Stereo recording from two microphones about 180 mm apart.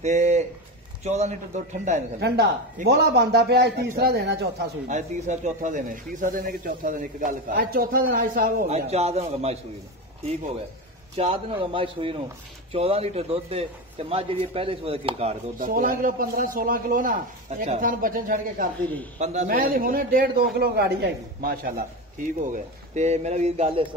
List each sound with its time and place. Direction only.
0.0 s a man's voice: 40° right (ahead or behind)
2.1 s a man's voice: 65° right (ahead or behind)
4.8 s speech: 40° right (ahead or behind)
8.6 s a man's voice: 35° right (ahead or behind)
11.1 s a man's voice: 35° right (ahead or behind)
15.6 s speech: 55° right (ahead or behind)
19.1 s a man's voice: 40° right (ahead or behind); by 21.8 s 55° right (ahead or behind)
22.4 s a man's voice: 40° right (ahead or behind)